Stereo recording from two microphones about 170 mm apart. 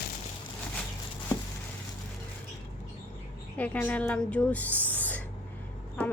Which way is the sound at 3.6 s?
10° left (ahead or behind).